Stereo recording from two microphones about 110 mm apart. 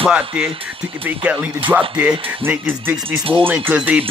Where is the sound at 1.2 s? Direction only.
15° right (ahead or behind).